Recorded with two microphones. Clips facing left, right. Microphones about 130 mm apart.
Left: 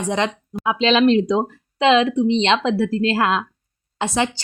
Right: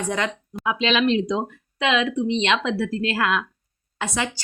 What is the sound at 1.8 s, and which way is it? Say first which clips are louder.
A woman's voice: left 6 dB; 30° left (ahead or behind).